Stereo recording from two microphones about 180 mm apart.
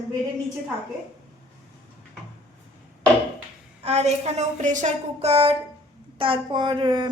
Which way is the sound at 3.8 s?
35° right (ahead or behind).